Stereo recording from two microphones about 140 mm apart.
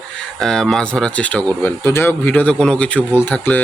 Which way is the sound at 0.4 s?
5° left (ahead or behind).